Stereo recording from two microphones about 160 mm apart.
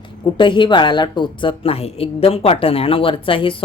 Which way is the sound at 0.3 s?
30° left (ahead or behind).